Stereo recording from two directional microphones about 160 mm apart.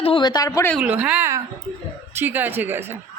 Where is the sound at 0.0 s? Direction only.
30° left (ahead or behind).